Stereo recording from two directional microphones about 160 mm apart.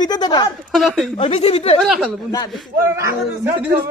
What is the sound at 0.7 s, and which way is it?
Speech, centre (ahead or behind).